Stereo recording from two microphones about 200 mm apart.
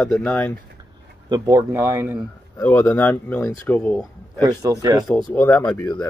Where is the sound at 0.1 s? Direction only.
5° left (ahead or behind).